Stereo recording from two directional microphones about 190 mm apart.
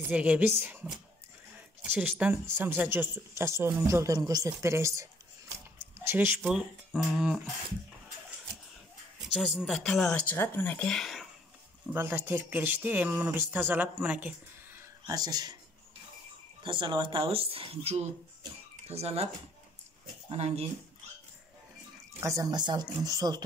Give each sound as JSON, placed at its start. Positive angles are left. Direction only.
{"t": 0.1, "sound": "speech", "side_deg": -5}
{"t": 6.0, "sound": "speech", "side_deg": -10}
{"t": 9.3, "sound": "speech", "side_deg": 0}
{"t": 11.8, "sound": "speech", "side_deg": -10}
{"t": 15.0, "sound": "speech", "side_deg": -20}
{"t": 16.6, "sound": "speech", "side_deg": -25}
{"t": 20.2, "sound": "speech", "side_deg": -30}
{"t": 22.2, "sound": "speech", "side_deg": -15}